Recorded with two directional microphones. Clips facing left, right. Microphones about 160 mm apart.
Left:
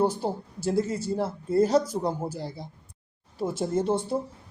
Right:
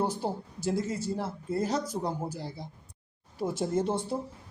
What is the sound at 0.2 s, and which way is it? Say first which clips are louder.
Speech: left 3 dB; 30° left (ahead or behind).